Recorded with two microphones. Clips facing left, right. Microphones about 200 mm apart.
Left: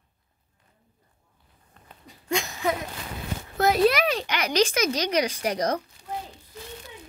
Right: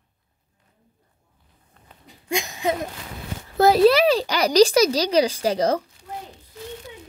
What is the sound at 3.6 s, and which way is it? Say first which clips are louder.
Speech: right 6 dB; 30° right (ahead or behind).